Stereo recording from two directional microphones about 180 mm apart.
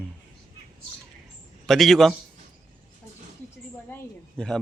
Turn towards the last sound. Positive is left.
turn(degrees=5)  # may be behind; listen again after turning